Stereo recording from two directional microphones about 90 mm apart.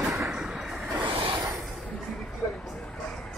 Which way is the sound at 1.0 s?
75° right (ahead or behind).